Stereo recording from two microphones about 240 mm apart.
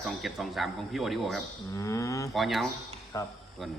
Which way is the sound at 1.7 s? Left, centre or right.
Centre.